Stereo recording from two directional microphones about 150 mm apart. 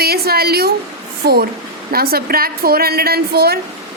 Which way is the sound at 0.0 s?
90° right.